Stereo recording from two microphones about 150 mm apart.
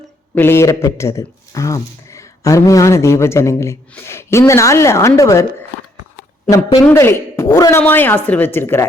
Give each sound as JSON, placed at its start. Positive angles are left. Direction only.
{"t": 0.3, "sound": "a woman's voice", "side_deg": 15}